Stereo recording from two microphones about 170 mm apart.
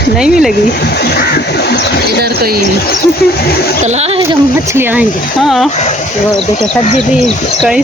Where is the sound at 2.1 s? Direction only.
65° right (ahead or behind).